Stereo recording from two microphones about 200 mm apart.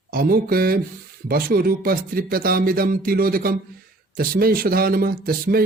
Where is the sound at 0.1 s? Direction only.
45° right (ahead or behind).